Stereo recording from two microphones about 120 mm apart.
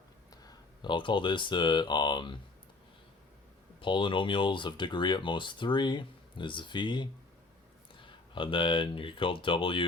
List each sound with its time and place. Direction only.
0.4 s speech: 40° left (ahead or behind)
3.8 s speech: 45° left (ahead or behind)